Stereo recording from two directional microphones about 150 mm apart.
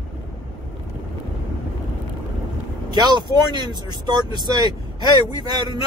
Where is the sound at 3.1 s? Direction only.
30° right (ahead or behind).